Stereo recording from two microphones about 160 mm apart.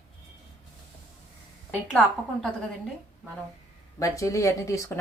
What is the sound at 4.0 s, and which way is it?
Speech, 20° left (ahead or behind).